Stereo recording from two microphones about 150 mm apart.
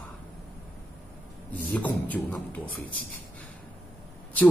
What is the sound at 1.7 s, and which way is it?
A man's voice, 10° left (ahead or behind).